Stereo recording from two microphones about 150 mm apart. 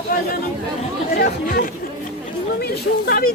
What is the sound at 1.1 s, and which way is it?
Speech, 85° left.